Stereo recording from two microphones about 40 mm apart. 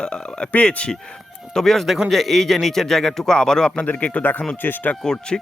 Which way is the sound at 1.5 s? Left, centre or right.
Centre.